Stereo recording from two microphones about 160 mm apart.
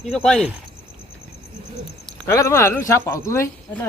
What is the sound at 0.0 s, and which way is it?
Speech, 5° left (ahead or behind).